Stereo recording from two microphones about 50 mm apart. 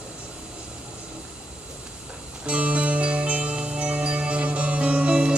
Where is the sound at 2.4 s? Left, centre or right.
Right.